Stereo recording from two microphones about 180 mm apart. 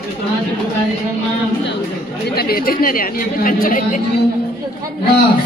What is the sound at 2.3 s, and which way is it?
Speech, 60° left (ahead or behind).